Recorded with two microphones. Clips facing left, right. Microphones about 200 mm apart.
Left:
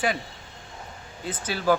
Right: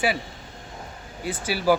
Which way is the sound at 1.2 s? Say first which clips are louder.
Right 2 dB; 10° right (ahead or behind).